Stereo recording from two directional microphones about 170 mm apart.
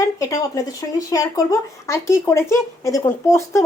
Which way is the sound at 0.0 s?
20° left (ahead or behind).